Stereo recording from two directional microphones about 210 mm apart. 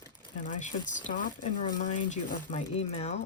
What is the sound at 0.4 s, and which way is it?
Speech, 35° left (ahead or behind).